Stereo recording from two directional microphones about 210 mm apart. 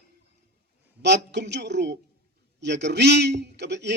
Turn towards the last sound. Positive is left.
turn(degrees=-55)  # may be behind; listen again after turning